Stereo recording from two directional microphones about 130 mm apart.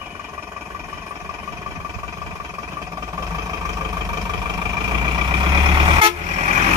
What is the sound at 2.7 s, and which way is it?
Vehicle, 25° right (ahead or behind).